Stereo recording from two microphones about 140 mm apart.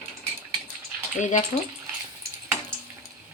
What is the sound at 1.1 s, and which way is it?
Speech, 65° left (ahead or behind).